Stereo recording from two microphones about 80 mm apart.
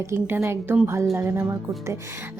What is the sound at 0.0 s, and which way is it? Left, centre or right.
A woman's voice, right.